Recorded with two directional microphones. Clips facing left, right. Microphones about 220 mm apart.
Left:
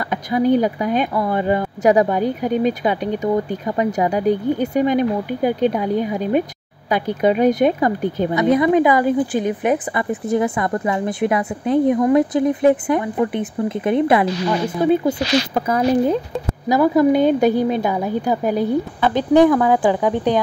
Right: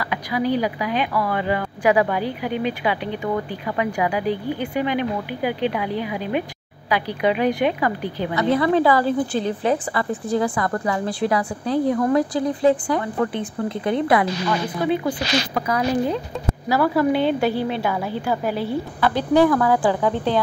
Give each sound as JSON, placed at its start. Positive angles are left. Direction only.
{"t": 0.1, "sound": "speech", "side_deg": 45}
{"t": 8.4, "sound": "a woman's voice", "side_deg": 20}
{"t": 17.1, "sound": "speech", "side_deg": 45}
{"t": 17.8, "sound": "a woman's voice", "side_deg": 20}
{"t": 18.4, "sound": "speech", "side_deg": 45}
{"t": 18.7, "sound": "a woman's voice", "side_deg": 20}